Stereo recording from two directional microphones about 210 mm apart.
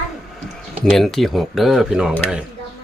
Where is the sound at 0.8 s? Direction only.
Centre (ahead or behind).